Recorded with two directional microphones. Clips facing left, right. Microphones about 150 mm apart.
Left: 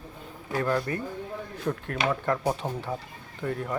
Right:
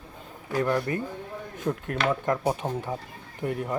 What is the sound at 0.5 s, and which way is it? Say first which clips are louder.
Speech: right 2 dB; 15° right (ahead or behind).